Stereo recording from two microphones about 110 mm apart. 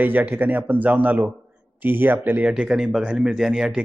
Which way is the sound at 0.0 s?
15° right (ahead or behind).